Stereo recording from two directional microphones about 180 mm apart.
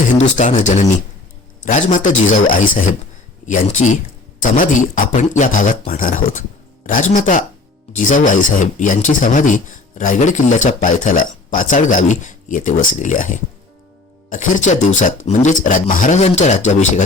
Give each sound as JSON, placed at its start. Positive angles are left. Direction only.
{"t": 0.2, "sound": "speech", "side_deg": 45}